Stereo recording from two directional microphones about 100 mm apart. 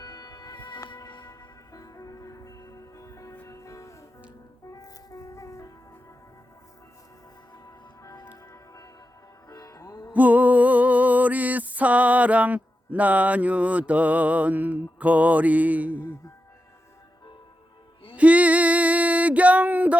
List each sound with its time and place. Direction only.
0.0 s music: 40° left (ahead or behind)
8.3 s music: 35° left (ahead or behind)
10.1 s music: 15° right (ahead or behind)
18.2 s female singing: 15° right (ahead or behind)